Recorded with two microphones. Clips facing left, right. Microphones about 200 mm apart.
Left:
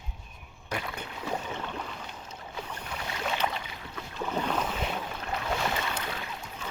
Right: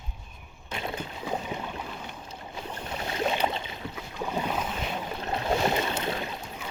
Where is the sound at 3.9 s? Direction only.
15° right (ahead or behind).